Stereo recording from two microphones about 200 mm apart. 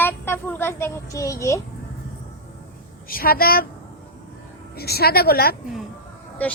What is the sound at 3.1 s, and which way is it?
Speech, 45° left (ahead or behind).